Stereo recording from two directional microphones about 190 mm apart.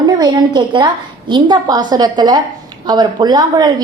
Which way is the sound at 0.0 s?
20° right (ahead or behind).